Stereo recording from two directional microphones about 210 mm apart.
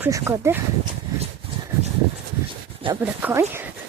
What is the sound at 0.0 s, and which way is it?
Speech, 15° right (ahead or behind).